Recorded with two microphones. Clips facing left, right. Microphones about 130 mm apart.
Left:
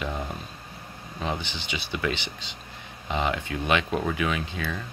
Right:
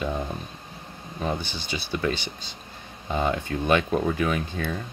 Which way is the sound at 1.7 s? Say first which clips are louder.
Right 2 dB; 35° right (ahead or behind).